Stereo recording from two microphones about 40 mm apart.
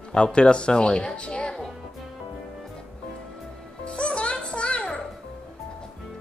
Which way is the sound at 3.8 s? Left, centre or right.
Left.